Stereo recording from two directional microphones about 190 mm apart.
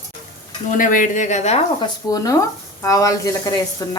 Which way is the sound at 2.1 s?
20° left (ahead or behind).